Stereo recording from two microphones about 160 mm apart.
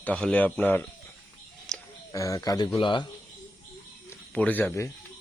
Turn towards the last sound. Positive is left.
turn(degrees=15)  # may be behind; listen again after turning